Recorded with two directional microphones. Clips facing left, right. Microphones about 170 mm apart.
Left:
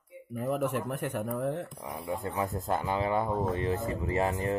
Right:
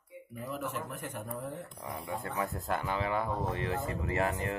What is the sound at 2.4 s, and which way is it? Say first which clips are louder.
Speech: left 2 dB; 20° left (ahead or behind).